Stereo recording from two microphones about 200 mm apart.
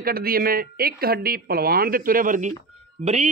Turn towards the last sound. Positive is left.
turn(degrees=-35)  # may be behind; listen again after turning